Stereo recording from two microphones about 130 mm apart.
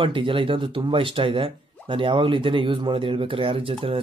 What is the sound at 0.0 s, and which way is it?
Speech, 40° right (ahead or behind).